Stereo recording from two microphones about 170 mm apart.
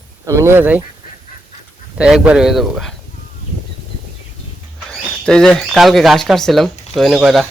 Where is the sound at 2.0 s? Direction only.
5° right (ahead or behind).